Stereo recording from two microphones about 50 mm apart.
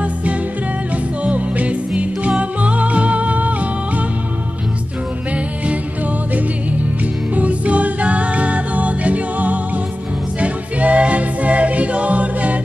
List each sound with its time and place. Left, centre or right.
0.0 s music: right
7.3 s music: right